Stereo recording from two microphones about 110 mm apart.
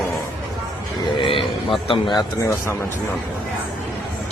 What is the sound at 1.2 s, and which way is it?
Speech, 55° left (ahead or behind).